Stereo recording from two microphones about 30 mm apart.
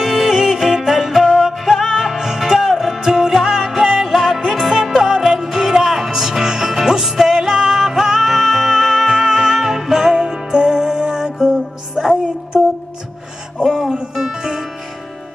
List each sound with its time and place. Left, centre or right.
0.0 s music: centre
3.0 s music: centre
4.1 s music: centre
5.0 s music: right
7.7 s music: centre
13.7 s music: right